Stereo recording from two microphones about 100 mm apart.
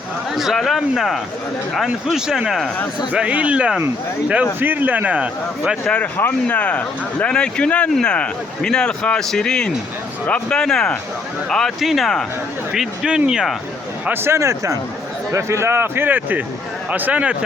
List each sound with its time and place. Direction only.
0.3 s a man's voice: centre (ahead or behind)
5.8 s a man's voice: 10° left (ahead or behind); by 13.6 s 5° right (ahead or behind)
14.0 s a man's voice: 20° right (ahead or behind)